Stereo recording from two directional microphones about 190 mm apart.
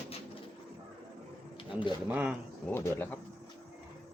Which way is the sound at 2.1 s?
5° right (ahead or behind).